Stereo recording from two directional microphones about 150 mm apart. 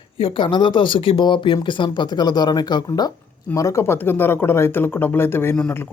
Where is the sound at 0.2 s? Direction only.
35° left (ahead or behind).